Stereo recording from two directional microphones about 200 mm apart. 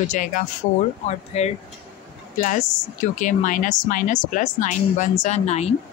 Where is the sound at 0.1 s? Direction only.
40° left (ahead or behind).